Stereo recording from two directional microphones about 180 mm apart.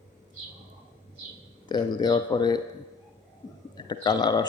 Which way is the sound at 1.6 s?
25° left (ahead or behind).